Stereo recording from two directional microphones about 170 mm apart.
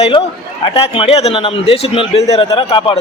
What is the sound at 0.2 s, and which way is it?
A man's voice, 35° left (ahead or behind).